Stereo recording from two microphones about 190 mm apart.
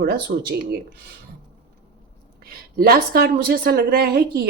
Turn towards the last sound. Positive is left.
turn(degrees=-55)  # may be behind; listen again after turning